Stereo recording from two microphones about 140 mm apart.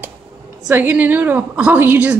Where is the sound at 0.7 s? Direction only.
10° right (ahead or behind).